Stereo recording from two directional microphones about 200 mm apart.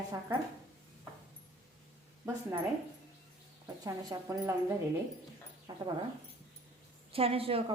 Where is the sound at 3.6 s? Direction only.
15° right (ahead or behind).